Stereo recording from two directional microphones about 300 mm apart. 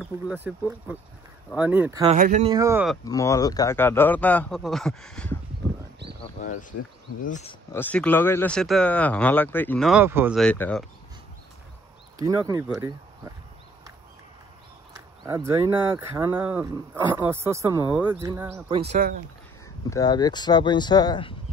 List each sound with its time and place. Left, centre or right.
0.0 s speech: centre
2.1 s speech: right
2.5 s speech: centre
3.1 s speech: centre
7.2 s speech: left
7.7 s speech: centre
12.2 s speech: centre
15.2 s speech: centre; by 19.1 s right
19.9 s speech: centre